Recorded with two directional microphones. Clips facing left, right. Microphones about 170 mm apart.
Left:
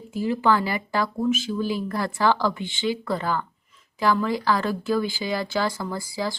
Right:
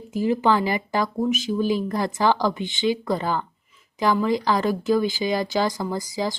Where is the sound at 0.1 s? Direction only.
20° right (ahead or behind).